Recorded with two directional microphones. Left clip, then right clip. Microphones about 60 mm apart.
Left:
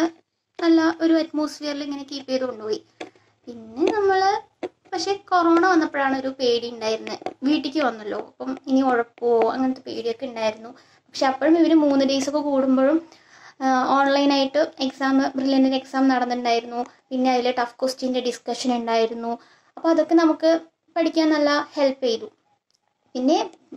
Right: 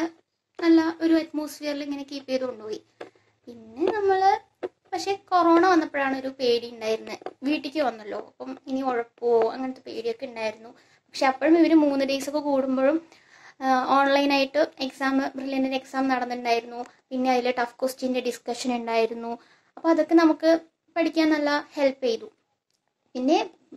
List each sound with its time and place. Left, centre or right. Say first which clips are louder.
0.6 s a child's voice: left 2 dB; centre